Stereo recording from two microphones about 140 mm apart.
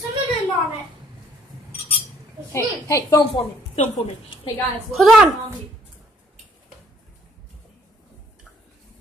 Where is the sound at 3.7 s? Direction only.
40° left (ahead or behind).